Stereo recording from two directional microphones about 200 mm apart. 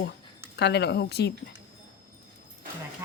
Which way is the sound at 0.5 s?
60° left (ahead or behind).